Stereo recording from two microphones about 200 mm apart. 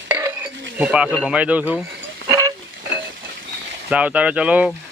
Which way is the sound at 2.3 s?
15° right (ahead or behind).